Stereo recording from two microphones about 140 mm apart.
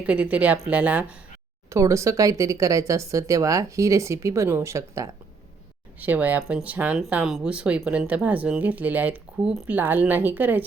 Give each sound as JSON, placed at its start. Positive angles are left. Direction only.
{"t": 0.0, "sound": "speech", "side_deg": -10}
{"t": 1.7, "sound": "speech", "side_deg": -20}